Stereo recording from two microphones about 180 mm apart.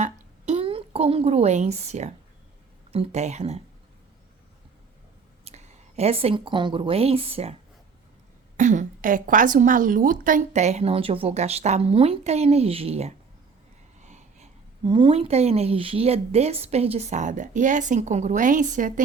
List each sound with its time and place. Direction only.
0.0 s a sound: 35° right (ahead or behind)
2.9 s speech: 35° right (ahead or behind)
5.5 s a woman's voice: 35° right (ahead or behind)
8.5 s speech: 45° right (ahead or behind)